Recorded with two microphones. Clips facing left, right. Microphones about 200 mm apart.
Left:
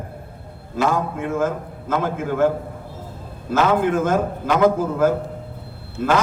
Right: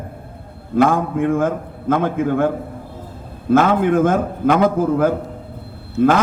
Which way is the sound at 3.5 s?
55° right (ahead or behind).